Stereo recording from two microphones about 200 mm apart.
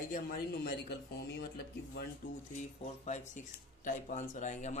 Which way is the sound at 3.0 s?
35° left (ahead or behind).